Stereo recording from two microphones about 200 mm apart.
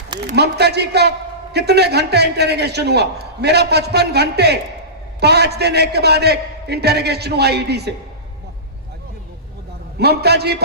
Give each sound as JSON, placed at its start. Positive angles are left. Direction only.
{"t": 0.3, "sound": "a man's voice", "side_deg": -55}
{"t": 10.0, "sound": "a man's voice", "side_deg": -55}